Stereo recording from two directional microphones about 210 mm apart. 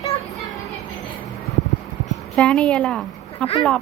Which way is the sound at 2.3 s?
5° left (ahead or behind).